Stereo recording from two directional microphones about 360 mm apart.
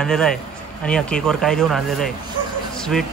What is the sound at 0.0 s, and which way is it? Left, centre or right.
Speech, centre.